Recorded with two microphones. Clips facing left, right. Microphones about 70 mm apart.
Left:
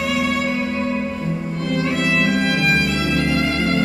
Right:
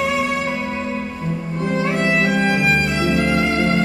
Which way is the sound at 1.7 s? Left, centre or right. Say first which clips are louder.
Right 1 dB; right.